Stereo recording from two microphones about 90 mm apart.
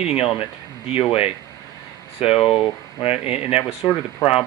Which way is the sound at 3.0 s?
90° left.